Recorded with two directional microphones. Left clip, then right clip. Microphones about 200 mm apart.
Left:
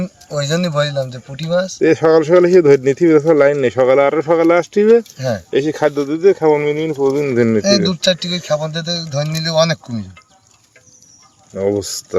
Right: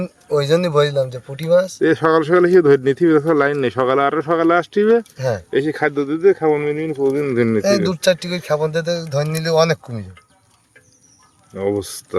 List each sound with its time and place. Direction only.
0.0 s speech: 40° right (ahead or behind)
1.8 s speech: 5° left (ahead or behind)
5.1 s speech: 45° right (ahead or behind)
5.5 s speech: 10° left (ahead or behind)
7.6 s speech: 55° right (ahead or behind)
11.5 s speech: 10° left (ahead or behind)